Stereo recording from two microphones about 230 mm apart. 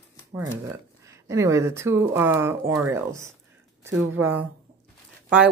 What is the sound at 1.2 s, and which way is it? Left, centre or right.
Speech, centre.